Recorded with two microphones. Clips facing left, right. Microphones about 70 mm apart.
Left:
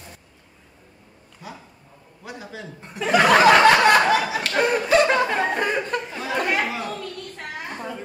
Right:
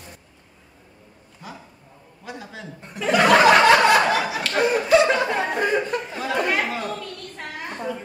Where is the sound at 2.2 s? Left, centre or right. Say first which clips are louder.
Even; centre.